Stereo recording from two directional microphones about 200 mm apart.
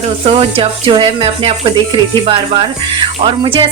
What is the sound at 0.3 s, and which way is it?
Speech, 25° right (ahead or behind).